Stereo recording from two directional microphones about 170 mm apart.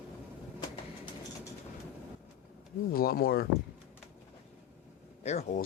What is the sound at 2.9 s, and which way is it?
Speech, 60° left (ahead or behind).